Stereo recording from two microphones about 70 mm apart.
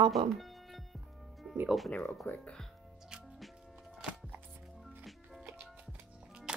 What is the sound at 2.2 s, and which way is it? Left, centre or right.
Speech, left.